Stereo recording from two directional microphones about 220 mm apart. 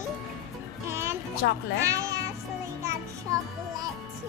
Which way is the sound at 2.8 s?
15° right (ahead or behind).